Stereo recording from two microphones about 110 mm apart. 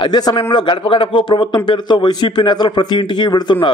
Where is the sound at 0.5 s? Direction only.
50° left (ahead or behind).